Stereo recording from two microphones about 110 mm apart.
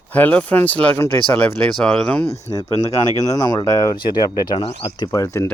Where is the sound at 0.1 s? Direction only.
15° left (ahead or behind).